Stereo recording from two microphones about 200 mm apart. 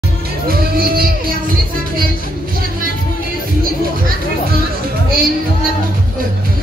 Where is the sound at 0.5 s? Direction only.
50° right (ahead or behind).